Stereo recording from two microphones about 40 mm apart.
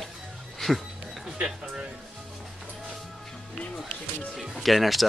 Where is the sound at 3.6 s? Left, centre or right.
Left.